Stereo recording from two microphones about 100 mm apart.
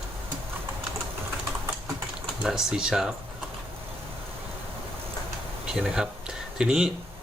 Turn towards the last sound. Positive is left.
turn(degrees=-5)  # may be behind; listen again after turning